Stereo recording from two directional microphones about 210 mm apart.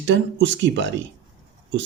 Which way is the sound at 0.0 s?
60° right (ahead or behind).